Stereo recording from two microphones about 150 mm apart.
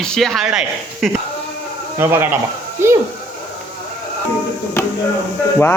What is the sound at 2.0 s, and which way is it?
Speech, 15° right (ahead or behind).